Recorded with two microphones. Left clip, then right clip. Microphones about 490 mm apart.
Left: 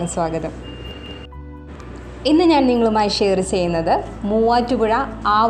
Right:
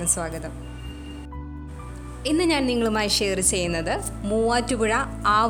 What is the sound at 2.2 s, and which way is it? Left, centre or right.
A woman's voice, right.